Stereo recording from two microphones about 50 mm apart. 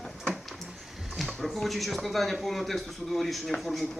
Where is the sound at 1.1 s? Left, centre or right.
Centre.